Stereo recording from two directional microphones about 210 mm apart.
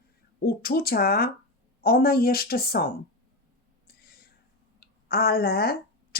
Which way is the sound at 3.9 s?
45° left (ahead or behind).